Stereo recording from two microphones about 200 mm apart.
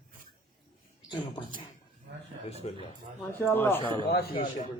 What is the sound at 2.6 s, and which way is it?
Speech, 30° left (ahead or behind).